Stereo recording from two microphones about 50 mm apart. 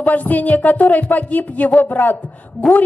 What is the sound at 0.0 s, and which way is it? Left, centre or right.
A woman's voice, left.